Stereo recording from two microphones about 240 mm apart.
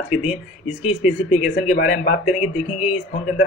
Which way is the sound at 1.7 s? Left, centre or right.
Left.